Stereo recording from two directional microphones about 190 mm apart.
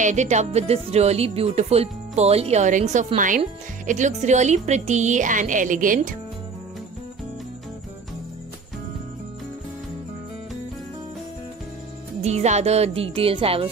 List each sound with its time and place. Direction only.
0.0 s speech: 40° right (ahead or behind)
12.2 s speech: 35° right (ahead or behind)